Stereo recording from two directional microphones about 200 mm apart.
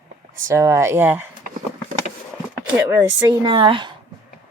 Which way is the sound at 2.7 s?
10° right (ahead or behind).